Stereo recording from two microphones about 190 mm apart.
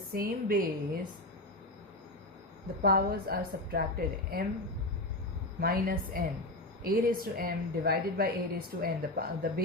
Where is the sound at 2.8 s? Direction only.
55° right (ahead or behind).